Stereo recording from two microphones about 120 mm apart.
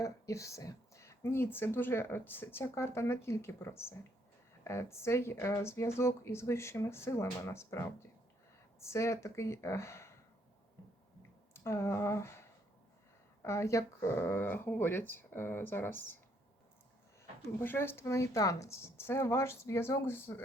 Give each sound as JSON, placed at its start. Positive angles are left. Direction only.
{"t": 0.0, "sound": "speech", "side_deg": 25}
{"t": 11.5, "sound": "speech", "side_deg": 20}
{"t": 17.4, "sound": "speech", "side_deg": 20}